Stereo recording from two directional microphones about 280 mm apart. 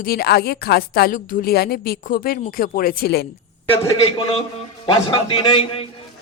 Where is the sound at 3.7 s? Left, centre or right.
Centre.